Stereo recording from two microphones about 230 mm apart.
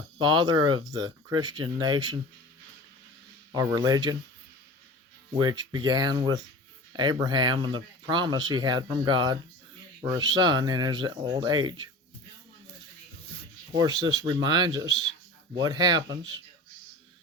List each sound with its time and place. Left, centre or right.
0.2 s speech: centre
3.5 s speech: centre
5.3 s speech: centre
13.7 s speech: centre